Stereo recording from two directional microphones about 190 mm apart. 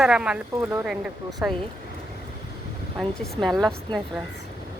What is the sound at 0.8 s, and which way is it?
Speech, centre (ahead or behind).